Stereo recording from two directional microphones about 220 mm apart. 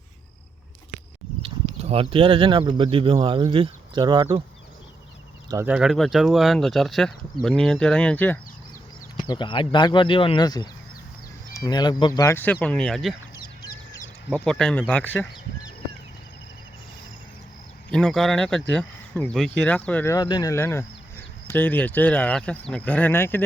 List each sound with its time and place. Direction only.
1.4 s speech: 30° right (ahead or behind)
5.5 s speech: 10° right (ahead or behind); by 8.4 s 10° left (ahead or behind)
9.2 s speech: 20° left (ahead or behind); by 13.1 s centre (ahead or behind)
14.3 s speech: 5° left (ahead or behind)
17.9 s speech: 5° left (ahead or behind)